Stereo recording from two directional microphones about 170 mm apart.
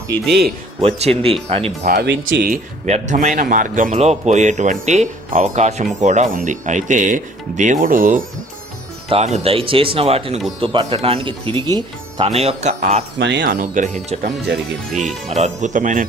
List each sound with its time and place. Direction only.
0.8 s speech: 35° right (ahead or behind)
2.0 s speech: 80° right
2.5 s speech: 45° right (ahead or behind)
9.0 s speech: 40° right (ahead or behind)
13.1 s speech: 90° right
13.6 s speech: 45° right (ahead or behind)
15.4 s speech: 45° right (ahead or behind)